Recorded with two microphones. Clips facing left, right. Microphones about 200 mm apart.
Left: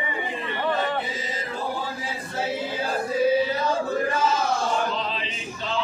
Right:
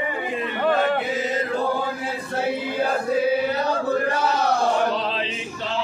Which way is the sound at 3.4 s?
65° right (ahead or behind).